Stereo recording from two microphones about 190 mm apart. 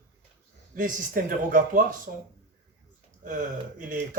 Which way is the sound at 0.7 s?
45° right (ahead or behind).